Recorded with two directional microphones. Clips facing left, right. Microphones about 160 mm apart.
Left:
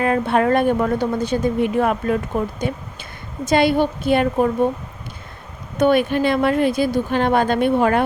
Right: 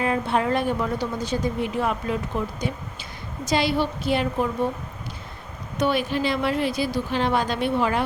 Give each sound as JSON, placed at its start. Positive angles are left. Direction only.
{"t": 0.0, "sound": "a woman's voice", "side_deg": 60}
{"t": 5.7, "sound": "a woman's voice", "side_deg": 55}